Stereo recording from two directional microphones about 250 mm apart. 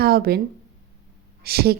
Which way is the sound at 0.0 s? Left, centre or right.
Right.